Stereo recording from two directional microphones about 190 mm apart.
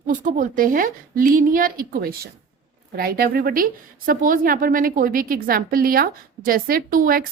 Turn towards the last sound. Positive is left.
turn(degrees=-45)  # may be behind; listen again after turning